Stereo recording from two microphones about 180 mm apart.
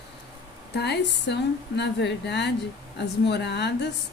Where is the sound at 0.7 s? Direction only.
70° left (ahead or behind).